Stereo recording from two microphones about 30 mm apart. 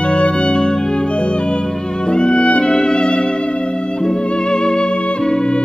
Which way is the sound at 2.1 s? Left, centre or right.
Left.